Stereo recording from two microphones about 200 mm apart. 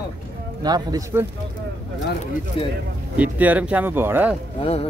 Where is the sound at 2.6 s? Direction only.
25° left (ahead or behind).